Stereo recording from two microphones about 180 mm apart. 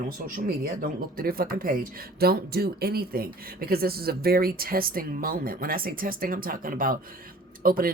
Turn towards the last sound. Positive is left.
turn(degrees=-55)  # may be behind; listen again after turning